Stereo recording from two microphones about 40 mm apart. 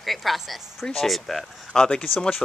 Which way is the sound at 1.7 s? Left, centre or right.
Left.